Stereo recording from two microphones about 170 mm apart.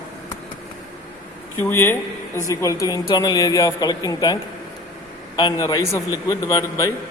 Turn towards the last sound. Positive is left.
turn(degrees=20)  # may be behind; listen again after turning